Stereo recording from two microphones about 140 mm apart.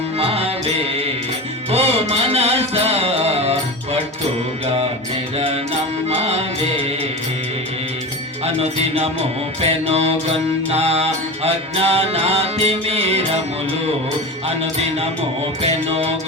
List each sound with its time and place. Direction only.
0.2 s music: 45° right (ahead or behind)
6.1 s music: 50° right (ahead or behind)
9.6 s mantra: 45° right (ahead or behind)
15.6 s mantra: 45° right (ahead or behind)